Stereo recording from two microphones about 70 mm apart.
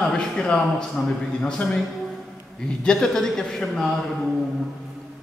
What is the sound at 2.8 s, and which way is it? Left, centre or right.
A man's voice, centre.